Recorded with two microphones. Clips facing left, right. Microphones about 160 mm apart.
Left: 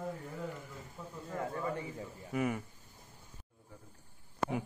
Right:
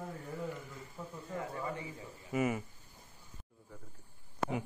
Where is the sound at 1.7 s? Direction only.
50° left (ahead or behind).